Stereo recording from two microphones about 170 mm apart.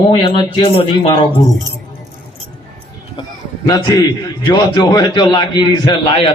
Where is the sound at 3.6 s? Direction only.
25° left (ahead or behind).